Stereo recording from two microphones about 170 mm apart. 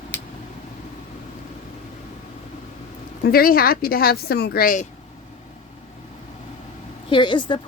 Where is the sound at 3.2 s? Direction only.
60° left (ahead or behind).